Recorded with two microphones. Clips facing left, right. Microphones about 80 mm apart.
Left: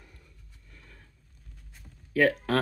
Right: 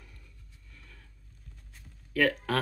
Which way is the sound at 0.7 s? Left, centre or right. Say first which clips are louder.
Left 1 dB; left.